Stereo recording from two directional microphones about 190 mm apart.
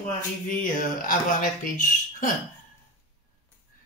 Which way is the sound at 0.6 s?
45° left (ahead or behind).